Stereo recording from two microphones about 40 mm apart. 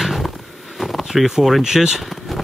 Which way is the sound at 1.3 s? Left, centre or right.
Centre.